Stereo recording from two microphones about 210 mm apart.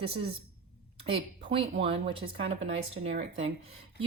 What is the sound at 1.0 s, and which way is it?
A woman's voice, 25° right (ahead or behind).